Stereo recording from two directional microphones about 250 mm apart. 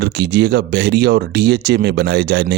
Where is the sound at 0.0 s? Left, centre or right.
Right.